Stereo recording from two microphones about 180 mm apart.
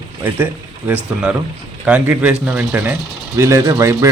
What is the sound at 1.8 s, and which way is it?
Speech, 5° right (ahead or behind).